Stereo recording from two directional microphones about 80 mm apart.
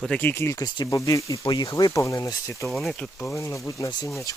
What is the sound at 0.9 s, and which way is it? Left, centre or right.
Speech, left.